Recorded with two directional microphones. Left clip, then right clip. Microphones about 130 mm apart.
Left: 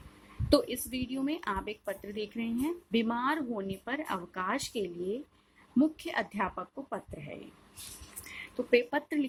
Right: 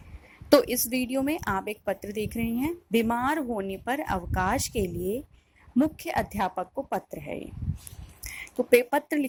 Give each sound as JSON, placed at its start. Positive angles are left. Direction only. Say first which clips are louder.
{"t": 0.6, "sound": "a woman's voice", "louder": "right 8 dB", "side_deg": -50}